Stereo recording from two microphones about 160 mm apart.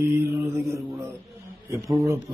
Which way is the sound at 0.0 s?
15° right (ahead or behind).